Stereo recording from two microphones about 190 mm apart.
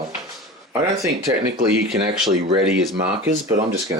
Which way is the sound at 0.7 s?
15° right (ahead or behind).